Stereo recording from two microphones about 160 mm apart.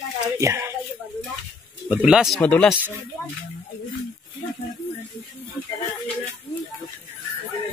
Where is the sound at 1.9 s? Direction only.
5° right (ahead or behind).